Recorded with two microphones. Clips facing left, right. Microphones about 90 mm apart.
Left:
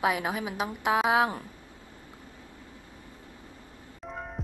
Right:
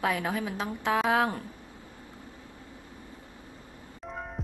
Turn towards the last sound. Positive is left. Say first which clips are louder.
# even
turn(degrees=0)  # may be behind; listen again after turning